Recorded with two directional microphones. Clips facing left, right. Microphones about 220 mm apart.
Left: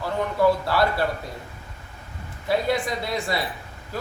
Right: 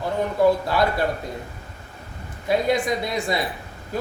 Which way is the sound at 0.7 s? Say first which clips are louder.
Right 1 dB; 15° right (ahead or behind).